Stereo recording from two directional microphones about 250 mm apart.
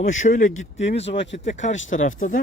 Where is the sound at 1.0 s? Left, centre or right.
Left.